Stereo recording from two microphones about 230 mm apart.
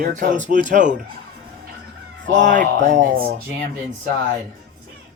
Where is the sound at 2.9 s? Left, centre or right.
Right.